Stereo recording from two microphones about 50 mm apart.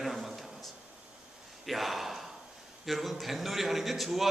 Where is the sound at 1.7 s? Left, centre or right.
Centre.